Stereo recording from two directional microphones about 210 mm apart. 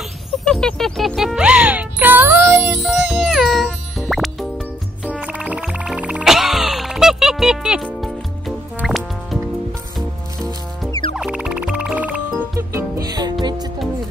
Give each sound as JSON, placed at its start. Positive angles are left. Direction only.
{"t": 0.5, "sound": "music", "side_deg": 5}
{"t": 10.9, "sound": "music", "side_deg": 20}
{"t": 11.1, "sound": "music", "side_deg": -5}